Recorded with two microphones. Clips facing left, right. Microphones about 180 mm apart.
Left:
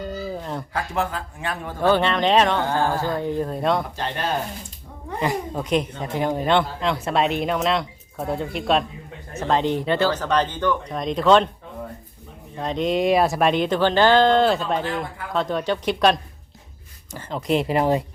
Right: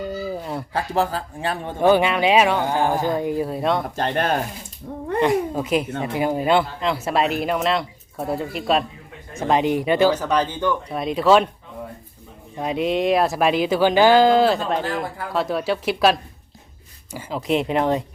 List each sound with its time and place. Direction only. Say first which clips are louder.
0.0 s a sound: right 2 dB; 10° right (ahead or behind)
0.7 s speech: right 4 dB; 30° right (ahead or behind)
1.8 s speech: right 2 dB; 10° right (ahead or behind)
3.9 s speech: right 5 dB; 50° right (ahead or behind)
5.2 s speech: right 4 dB; centre (ahead or behind)
9.3 s speech: right 2 dB; 10° right (ahead or behind)
12.5 s speech: right 1 dB; 10° right (ahead or behind)
17.2 s speech: even; 5° right (ahead or behind)